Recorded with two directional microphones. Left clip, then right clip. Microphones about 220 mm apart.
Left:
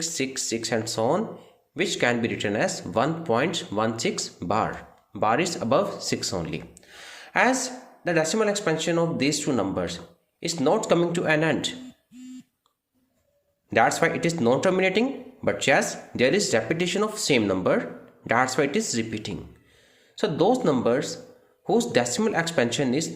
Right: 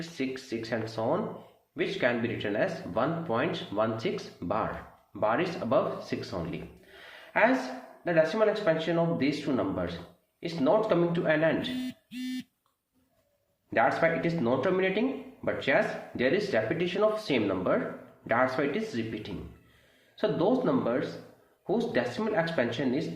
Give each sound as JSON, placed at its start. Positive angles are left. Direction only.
{"t": 0.2, "sound": "speech", "side_deg": 45}
{"t": 13.7, "sound": "speech", "side_deg": 45}